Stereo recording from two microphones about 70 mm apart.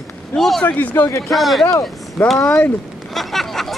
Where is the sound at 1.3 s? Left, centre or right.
Centre.